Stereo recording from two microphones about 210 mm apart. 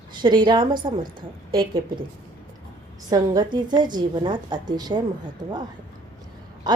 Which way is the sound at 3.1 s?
20° right (ahead or behind).